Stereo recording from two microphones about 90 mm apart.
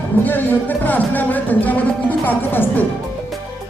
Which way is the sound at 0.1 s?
20° left (ahead or behind).